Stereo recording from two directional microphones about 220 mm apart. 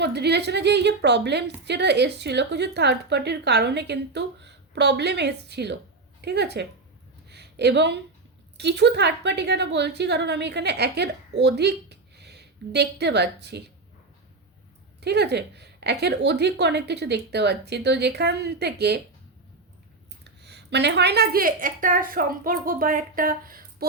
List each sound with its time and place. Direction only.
0.0 s a woman's voice: 50° right (ahead or behind)
7.3 s a sound: 50° right (ahead or behind)
8.5 s a woman's voice: 50° right (ahead or behind)
15.0 s a woman's voice: 50° right (ahead or behind)
20.2 s a woman's voice: 50° right (ahead or behind)